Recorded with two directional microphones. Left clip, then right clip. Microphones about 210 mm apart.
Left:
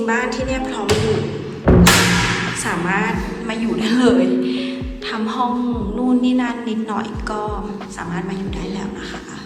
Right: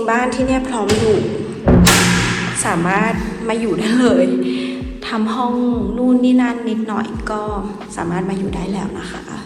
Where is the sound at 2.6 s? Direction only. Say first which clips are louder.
Right 5 dB; centre (ahead or behind).